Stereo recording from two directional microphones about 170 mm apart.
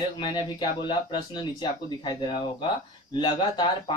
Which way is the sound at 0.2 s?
30° left (ahead or behind).